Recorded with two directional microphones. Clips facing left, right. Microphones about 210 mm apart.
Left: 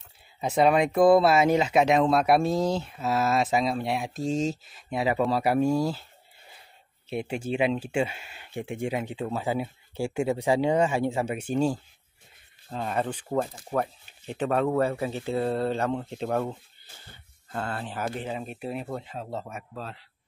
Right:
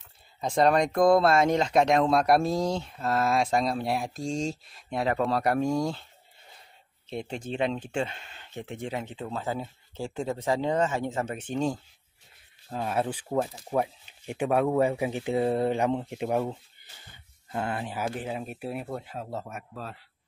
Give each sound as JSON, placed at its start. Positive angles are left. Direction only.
{"t": 0.4, "sound": "speech", "side_deg": 5}
{"t": 7.1, "sound": "speech", "side_deg": 10}
{"t": 12.6, "sound": "speech", "side_deg": -5}